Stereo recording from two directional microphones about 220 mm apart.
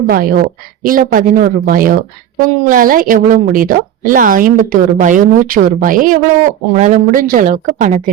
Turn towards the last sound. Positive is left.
turn(degrees=-35)  # may be behind; listen again after turning